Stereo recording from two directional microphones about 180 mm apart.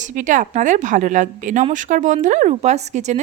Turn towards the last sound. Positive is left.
turn(degrees=-40)  # may be behind; listen again after turning